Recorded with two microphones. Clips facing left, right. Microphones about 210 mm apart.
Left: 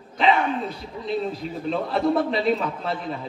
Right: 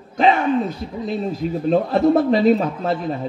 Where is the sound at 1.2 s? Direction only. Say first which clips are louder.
Right 7 dB; 45° right (ahead or behind).